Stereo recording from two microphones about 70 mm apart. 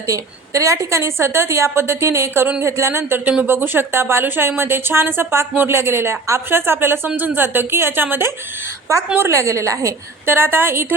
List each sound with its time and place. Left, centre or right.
0.1 s a woman's voice: right
9.1 s a woman's voice: right
10.2 s a woman's voice: right